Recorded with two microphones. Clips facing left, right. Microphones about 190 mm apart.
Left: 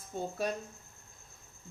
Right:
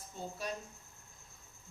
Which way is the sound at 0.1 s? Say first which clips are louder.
Left 8 dB; 60° left (ahead or behind).